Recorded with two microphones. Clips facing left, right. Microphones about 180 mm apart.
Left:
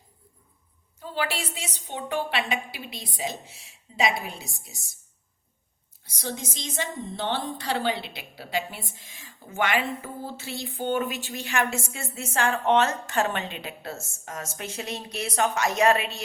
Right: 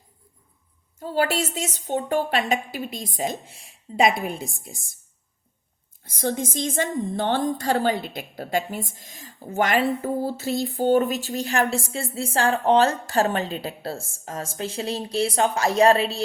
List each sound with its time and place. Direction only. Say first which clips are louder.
0.9 s a woman's voice: right 7 dB; 45° right (ahead or behind)
6.0 s a woman's voice: right 8 dB; 50° right (ahead or behind); by 16.2 s 30° right (ahead or behind)